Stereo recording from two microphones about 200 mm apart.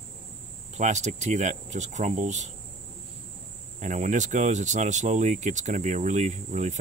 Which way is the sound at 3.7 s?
35° right (ahead or behind).